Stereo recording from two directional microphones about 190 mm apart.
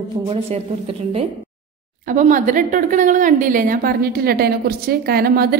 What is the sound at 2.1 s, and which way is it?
A woman's voice, 45° right (ahead or behind).